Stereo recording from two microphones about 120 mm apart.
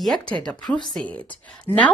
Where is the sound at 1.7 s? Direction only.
55° right (ahead or behind).